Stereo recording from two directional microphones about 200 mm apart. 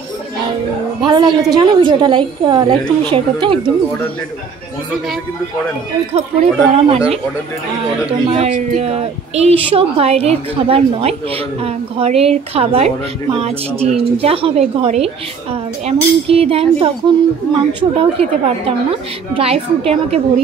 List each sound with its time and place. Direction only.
1.0 s a woman's voice: 20° right (ahead or behind)
6.1 s speech: 30° right (ahead or behind)
8.1 s a woman's voice: 30° right (ahead or behind)